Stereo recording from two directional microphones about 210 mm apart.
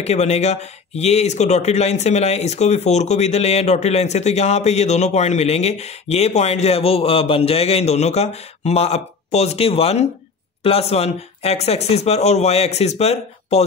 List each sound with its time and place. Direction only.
0.0 s speech: 30° left (ahead or behind)